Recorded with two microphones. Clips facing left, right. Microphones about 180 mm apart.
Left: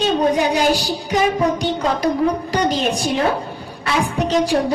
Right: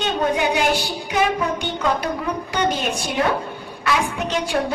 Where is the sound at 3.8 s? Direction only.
35° left (ahead or behind).